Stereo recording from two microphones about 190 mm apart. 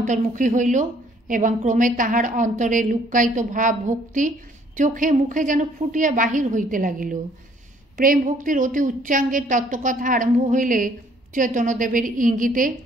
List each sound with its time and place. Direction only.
0.0 s a woman's voice: 40° right (ahead or behind)